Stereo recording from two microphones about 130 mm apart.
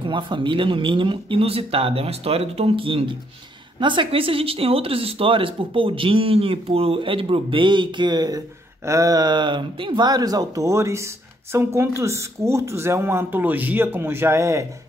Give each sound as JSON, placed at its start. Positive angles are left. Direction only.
{"t": 0.0, "sound": "speech", "side_deg": -40}